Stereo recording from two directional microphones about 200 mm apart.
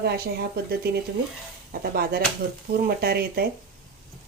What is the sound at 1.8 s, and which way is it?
Speech, 50° right (ahead or behind).